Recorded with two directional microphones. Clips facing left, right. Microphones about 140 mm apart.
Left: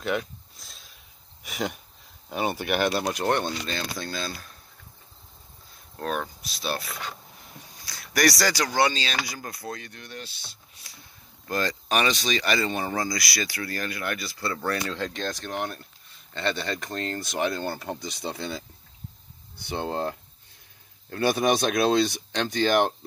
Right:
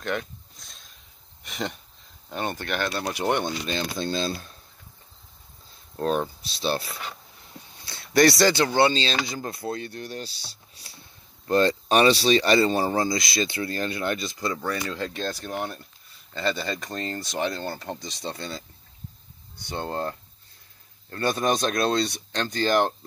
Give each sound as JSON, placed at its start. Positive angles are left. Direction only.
{"t": 0.0, "sound": "a sound", "side_deg": 5}
{"t": 1.4, "sound": "speech", "side_deg": 5}
{"t": 3.1, "sound": "speech", "side_deg": -10}
{"t": 5.9, "sound": "speech", "side_deg": -30}
{"t": 14.6, "sound": "speech", "side_deg": 0}
{"t": 19.7, "sound": "speech", "side_deg": 15}